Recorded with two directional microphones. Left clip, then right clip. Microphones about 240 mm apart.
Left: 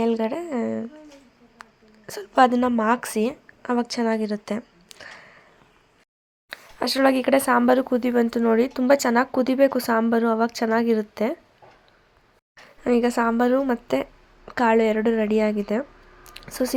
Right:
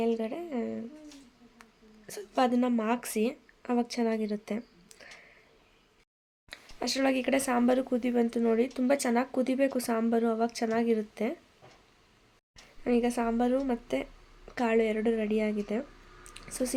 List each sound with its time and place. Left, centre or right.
0.0 s speech: centre
1.6 s hiccup: centre
2.0 s a woman's voice: centre
6.5 s speech: centre
12.8 s speech: centre